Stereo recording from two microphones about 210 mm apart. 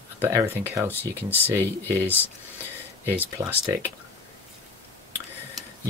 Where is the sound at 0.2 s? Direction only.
10° right (ahead or behind).